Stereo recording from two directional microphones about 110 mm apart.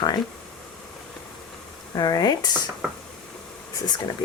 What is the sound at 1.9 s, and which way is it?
Speech, 35° left (ahead or behind).